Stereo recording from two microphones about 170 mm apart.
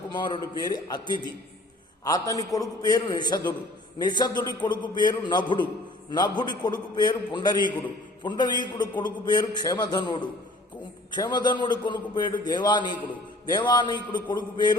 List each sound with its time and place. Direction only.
0.1 s a man's voice: 25° left (ahead or behind)